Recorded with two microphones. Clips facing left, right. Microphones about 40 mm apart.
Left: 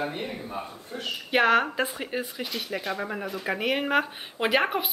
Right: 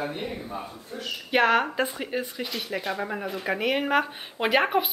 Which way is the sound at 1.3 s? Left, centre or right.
Centre.